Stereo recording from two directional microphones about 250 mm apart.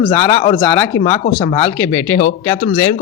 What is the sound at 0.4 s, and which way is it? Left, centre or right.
Speech, centre.